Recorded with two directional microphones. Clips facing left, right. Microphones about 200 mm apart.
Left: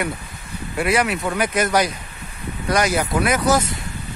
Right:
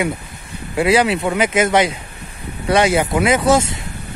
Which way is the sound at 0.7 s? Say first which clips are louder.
Right 5 dB; 30° right (ahead or behind).